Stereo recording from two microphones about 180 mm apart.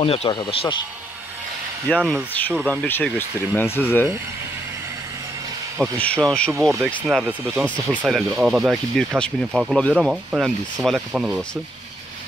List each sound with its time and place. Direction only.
0.0 s speech: 35° left (ahead or behind)
2.0 s speech: 5° right (ahead or behind); by 4.0 s 10° left (ahead or behind)
5.9 s speech: 5° left (ahead or behind)
7.6 s speech: 10° left (ahead or behind)
8.0 s speech: 5° right (ahead or behind)